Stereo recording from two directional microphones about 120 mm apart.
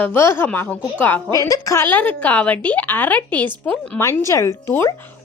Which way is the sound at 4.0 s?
25° left (ahead or behind).